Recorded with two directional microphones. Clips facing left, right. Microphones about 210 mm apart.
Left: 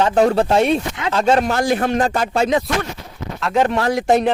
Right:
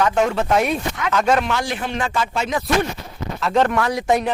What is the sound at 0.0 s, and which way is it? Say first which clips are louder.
Speech: left 4 dB; 35° left (ahead or behind).